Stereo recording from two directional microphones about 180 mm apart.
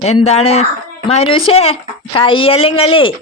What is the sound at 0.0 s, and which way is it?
Speech, 35° left (ahead or behind).